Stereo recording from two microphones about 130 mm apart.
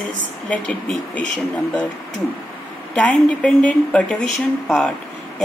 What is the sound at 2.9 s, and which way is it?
A woman's voice, 10° left (ahead or behind).